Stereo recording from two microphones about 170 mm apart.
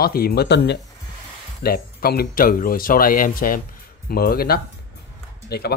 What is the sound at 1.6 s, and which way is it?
Speech, 65° left (ahead or behind).